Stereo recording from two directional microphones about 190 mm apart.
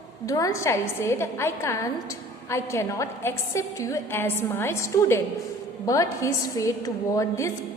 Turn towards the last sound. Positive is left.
turn(degrees=15)  # may be behind; listen again after turning